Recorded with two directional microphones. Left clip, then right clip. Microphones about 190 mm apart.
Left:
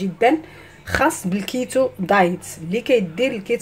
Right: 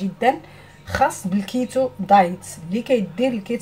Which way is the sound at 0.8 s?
60° left (ahead or behind).